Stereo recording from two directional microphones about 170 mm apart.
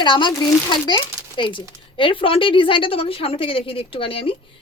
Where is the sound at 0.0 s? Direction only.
30° left (ahead or behind).